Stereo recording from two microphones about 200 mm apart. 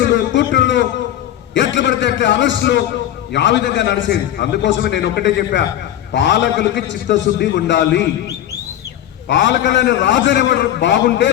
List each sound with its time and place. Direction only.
0.0 s a man's voice: 65° left (ahead or behind)
9.3 s a man's voice: 65° left (ahead or behind)